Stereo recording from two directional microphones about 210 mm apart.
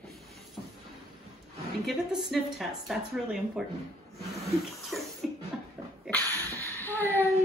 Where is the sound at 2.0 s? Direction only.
Centre (ahead or behind).